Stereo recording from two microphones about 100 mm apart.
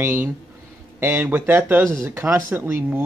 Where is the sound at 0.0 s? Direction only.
20° right (ahead or behind).